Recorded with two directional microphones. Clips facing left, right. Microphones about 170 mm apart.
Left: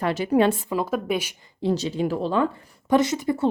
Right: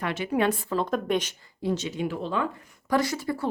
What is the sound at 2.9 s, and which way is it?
Speech, 20° left (ahead or behind).